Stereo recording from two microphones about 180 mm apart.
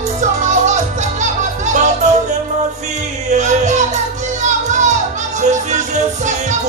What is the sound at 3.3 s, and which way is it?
Music, 40° right (ahead or behind).